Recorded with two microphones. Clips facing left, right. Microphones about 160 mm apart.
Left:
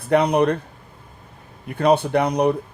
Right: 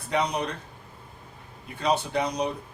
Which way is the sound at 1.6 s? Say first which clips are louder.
Left 9 dB; 60° left (ahead or behind).